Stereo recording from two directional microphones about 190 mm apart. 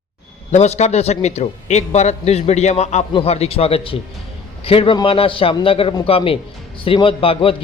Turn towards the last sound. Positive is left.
turn(degrees=30)  # may be behind; listen again after turning